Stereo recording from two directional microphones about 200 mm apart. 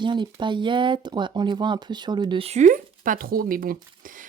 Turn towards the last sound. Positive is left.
turn(degrees=-40)  # may be behind; listen again after turning